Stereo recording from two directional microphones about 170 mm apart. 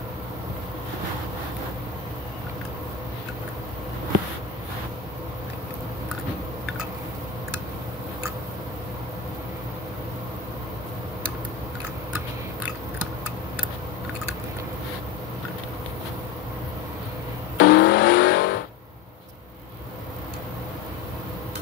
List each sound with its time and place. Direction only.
17.6 s vehicle: 90° left